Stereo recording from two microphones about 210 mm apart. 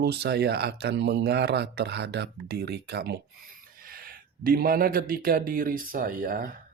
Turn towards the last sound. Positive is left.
turn(degrees=-40)  # may be behind; listen again after turning